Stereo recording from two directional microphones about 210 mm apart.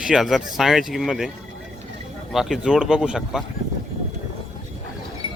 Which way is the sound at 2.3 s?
Centre (ahead or behind).